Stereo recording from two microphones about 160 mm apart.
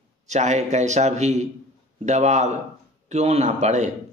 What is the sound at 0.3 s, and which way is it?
A man's voice, 45° right (ahead or behind).